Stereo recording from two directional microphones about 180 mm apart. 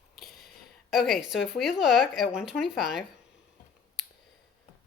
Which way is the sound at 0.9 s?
Centre (ahead or behind).